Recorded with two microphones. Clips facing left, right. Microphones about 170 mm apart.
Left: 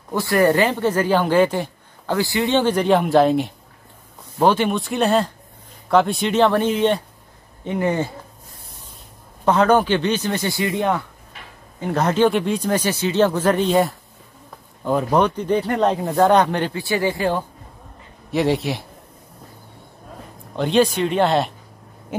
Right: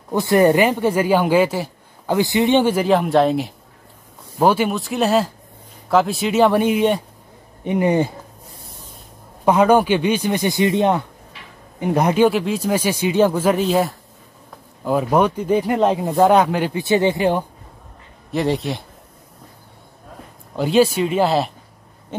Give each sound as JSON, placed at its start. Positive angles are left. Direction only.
{"t": 0.1, "sound": "speech", "side_deg": -20}
{"t": 2.1, "sound": "a man's voice", "side_deg": -20}
{"t": 9.4, "sound": "speech", "side_deg": -10}
{"t": 16.7, "sound": "speech", "side_deg": -20}
{"t": 18.3, "sound": "a man's voice", "side_deg": 0}
{"t": 20.5, "sound": "a man's voice", "side_deg": -5}